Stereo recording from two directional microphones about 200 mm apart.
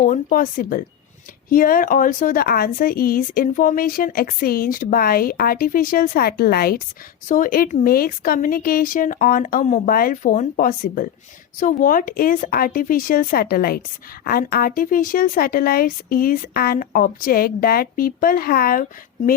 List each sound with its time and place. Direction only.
0.0 s speech: 45° left (ahead or behind)